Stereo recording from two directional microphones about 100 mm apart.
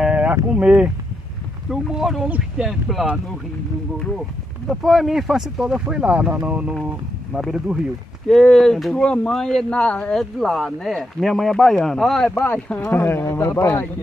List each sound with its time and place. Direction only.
0.0 s a sound: 15° right (ahead or behind)
0.5 s speech: 15° right (ahead or behind)
1.7 s speech: 5° right (ahead or behind)
4.6 s speech: centre (ahead or behind)
8.3 s speech: 5° left (ahead or behind)
13.0 s a man's voice: 25° left (ahead or behind)